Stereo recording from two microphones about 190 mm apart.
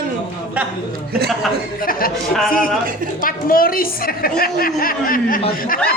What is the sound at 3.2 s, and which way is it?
A woman's voice, 50° left (ahead or behind).